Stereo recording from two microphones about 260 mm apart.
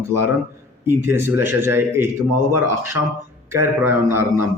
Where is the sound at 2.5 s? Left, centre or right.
Right.